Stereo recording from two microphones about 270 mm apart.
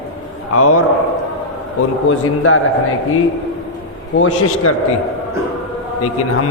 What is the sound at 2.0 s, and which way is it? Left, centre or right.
Speech, left.